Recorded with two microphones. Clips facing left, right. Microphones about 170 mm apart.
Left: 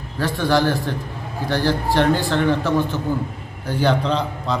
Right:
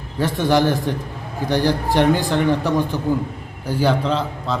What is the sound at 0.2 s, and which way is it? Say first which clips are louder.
A man's voice: right 2 dB; 20° right (ahead or behind).